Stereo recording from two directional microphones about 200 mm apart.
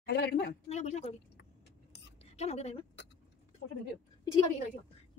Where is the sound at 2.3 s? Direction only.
30° left (ahead or behind).